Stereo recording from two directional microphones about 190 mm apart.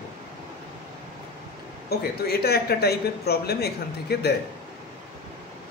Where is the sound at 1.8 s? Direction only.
55° left (ahead or behind).